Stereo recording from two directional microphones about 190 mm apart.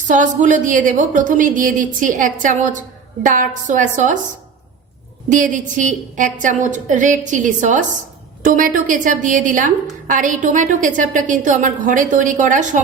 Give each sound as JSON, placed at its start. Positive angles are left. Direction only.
{"t": 0.1, "sound": "a woman's voice", "side_deg": -40}
{"t": 5.3, "sound": "a woman's voice", "side_deg": -40}